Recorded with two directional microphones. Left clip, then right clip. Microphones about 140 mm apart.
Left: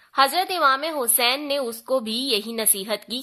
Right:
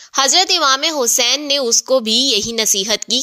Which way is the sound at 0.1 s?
30° right (ahead or behind).